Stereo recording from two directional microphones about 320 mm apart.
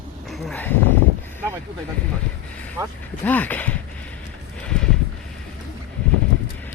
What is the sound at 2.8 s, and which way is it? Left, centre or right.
Speech, centre.